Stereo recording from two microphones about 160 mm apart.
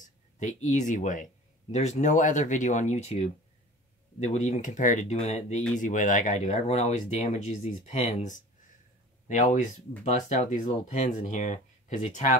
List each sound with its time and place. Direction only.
0.0 s speech: 45° left (ahead or behind)